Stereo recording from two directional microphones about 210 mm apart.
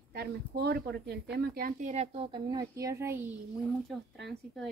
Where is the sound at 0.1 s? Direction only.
50° right (ahead or behind); by 3.3 s 10° right (ahead or behind).